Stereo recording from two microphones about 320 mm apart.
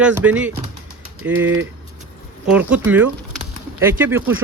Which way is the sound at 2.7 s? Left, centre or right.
Centre.